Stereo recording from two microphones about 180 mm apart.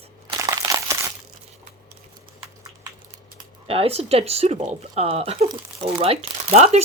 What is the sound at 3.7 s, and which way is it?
Speech, 35° right (ahead or behind).